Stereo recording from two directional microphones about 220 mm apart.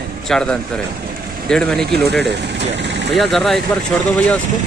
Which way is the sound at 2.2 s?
50° right (ahead or behind).